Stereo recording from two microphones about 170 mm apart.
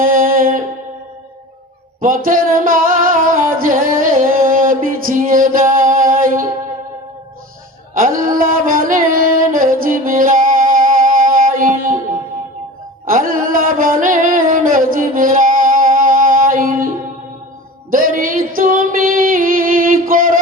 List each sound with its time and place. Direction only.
0.0 s music: 55° right (ahead or behind)
2.0 s music: 50° right (ahead or behind)
8.2 s music: 55° right (ahead or behind)
13.1 s music: 55° right (ahead or behind)
17.9 s music: 55° right (ahead or behind)